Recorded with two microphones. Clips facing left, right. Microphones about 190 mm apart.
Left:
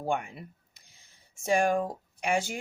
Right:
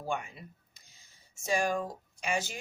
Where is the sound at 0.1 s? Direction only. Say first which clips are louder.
Left 4 dB; 55° left (ahead or behind).